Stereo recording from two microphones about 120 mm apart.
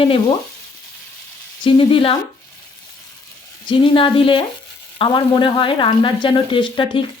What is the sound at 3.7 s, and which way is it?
Speech, 45° left (ahead or behind).